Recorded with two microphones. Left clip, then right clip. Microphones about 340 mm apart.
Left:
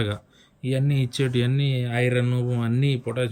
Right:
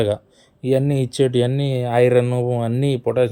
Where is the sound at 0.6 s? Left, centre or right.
Centre.